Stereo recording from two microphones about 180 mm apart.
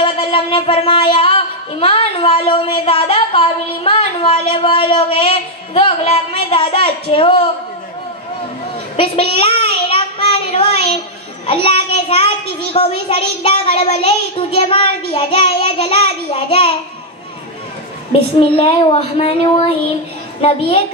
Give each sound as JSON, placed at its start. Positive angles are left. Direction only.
{"t": 0.0, "sound": "speech", "side_deg": 30}
{"t": 8.9, "sound": "a woman's voice", "side_deg": 30}
{"t": 9.8, "sound": "child singing", "side_deg": 30}
{"t": 11.4, "sound": "speech", "side_deg": 30}
{"t": 18.4, "sound": "speech", "side_deg": 30}